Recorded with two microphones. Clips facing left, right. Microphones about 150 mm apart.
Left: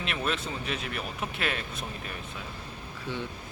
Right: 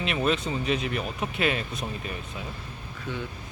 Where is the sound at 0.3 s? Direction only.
Centre (ahead or behind).